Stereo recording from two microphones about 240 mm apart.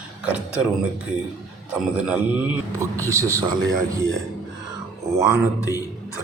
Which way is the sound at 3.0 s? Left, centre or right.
Centre.